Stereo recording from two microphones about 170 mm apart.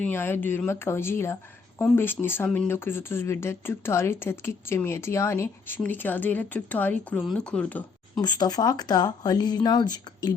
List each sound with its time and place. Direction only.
0.0 s speech: 10° left (ahead or behind)
8.2 s speech: 25° left (ahead or behind)